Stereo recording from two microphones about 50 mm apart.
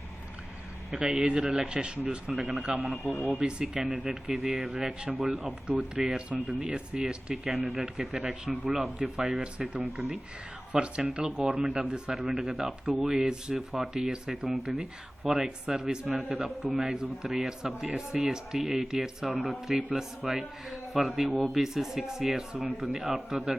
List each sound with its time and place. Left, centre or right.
0.9 s speech: right
2.3 s speech: centre
2.6 s speech: centre
3.0 s speech: centre
3.4 s speech: centre
5.6 s speech: centre
7.4 s speech: centre
10.7 s speech: centre